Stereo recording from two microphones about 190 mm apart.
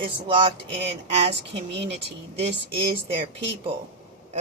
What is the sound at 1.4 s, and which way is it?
Speech, 65° right (ahead or behind).